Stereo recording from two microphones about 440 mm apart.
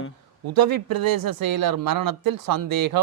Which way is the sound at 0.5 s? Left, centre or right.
Right.